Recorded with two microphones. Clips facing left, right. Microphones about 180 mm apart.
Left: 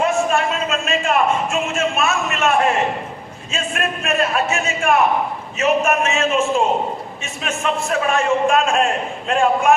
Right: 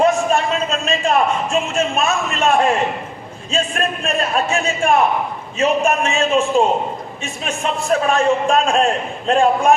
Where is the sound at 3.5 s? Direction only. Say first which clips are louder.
Right 3 dB; 35° right (ahead or behind).